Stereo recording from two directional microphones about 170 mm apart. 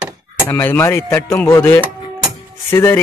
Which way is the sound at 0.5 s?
15° left (ahead or behind).